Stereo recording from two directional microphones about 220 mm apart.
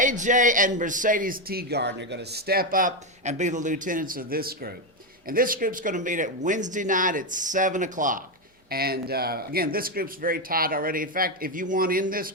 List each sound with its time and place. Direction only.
0.0 s speech: 35° right (ahead or behind)